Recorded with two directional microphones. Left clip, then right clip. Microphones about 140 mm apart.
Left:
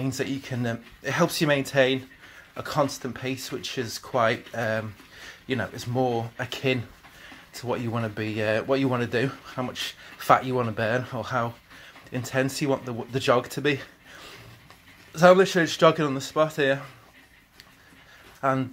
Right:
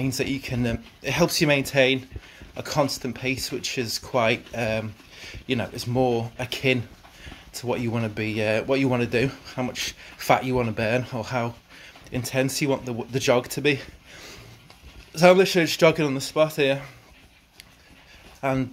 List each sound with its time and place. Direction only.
0.0 s speech: 35° right (ahead or behind)
18.4 s speech: 30° right (ahead or behind)